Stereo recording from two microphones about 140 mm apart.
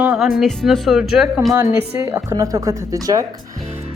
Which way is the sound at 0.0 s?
5° right (ahead or behind).